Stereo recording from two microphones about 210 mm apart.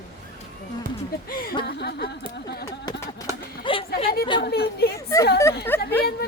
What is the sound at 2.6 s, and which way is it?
Speech, 15° left (ahead or behind).